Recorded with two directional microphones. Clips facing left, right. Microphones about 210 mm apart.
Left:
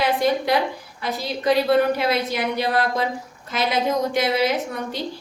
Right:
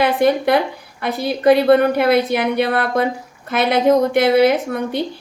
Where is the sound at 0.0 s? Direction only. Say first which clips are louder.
Right 5 dB; 55° right (ahead or behind).